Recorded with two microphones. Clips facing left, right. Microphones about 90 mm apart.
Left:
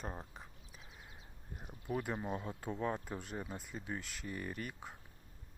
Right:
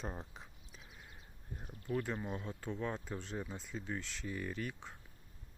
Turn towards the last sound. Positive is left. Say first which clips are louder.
# right 2 dB
turn(degrees=5)  # may be behind; listen again after turning